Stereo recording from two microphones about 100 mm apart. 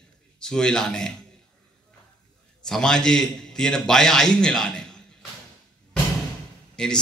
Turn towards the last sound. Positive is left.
turn(degrees=10)  # may be behind; listen again after turning